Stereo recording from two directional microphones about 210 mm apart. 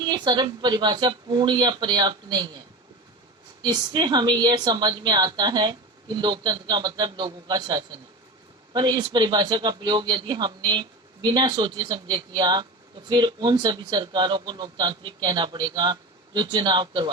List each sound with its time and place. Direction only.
0.0 s a woman's voice: 20° right (ahead or behind)
3.6 s a woman's voice: 20° right (ahead or behind)